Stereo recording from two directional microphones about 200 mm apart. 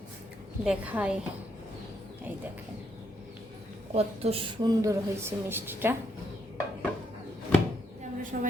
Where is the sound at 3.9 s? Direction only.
30° right (ahead or behind).